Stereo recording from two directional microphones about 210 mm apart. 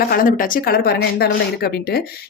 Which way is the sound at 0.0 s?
45° left (ahead or behind).